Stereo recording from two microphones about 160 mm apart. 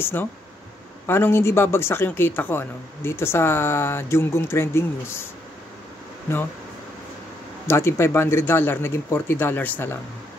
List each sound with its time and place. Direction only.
0.0 s a man's voice: 15° left (ahead or behind)
7.6 s a man's voice: 15° left (ahead or behind)